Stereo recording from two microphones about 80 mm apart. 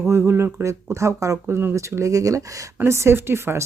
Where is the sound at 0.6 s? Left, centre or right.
Right.